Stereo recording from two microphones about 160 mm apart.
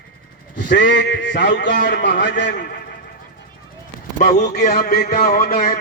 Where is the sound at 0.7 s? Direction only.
90° left.